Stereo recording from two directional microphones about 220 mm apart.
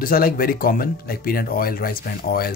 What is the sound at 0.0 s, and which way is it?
Speech, 40° left (ahead or behind).